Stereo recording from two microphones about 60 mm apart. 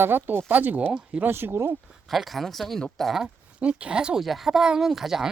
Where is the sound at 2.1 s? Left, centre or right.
Centre.